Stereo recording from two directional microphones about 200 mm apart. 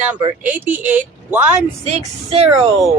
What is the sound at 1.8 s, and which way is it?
Speech, 35° right (ahead or behind).